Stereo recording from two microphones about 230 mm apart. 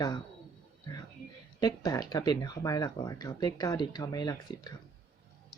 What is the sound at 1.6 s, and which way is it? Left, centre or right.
Speech, centre.